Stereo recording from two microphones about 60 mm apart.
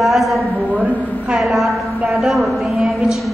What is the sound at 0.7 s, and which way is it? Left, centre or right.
Speech, right.